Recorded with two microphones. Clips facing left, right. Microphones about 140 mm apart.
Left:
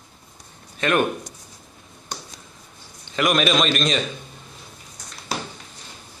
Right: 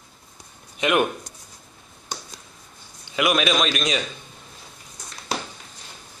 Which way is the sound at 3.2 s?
5° right (ahead or behind).